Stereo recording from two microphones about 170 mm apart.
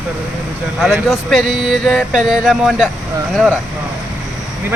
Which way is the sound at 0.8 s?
Centre (ahead or behind).